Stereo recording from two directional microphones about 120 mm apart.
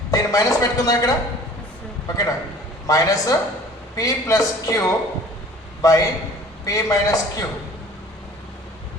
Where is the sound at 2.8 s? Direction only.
30° left (ahead or behind).